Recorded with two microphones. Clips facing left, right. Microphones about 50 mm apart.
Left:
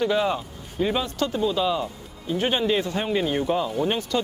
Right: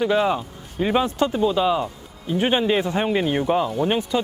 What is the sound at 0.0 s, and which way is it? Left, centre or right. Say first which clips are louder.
Speech: right 3 dB; centre.